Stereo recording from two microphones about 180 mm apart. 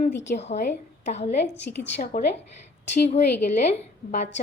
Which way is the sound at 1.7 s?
75° left (ahead or behind).